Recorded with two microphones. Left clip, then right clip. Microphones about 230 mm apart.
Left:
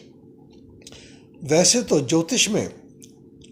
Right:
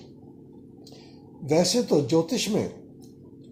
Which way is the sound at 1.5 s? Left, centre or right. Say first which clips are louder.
Left 4 dB; left.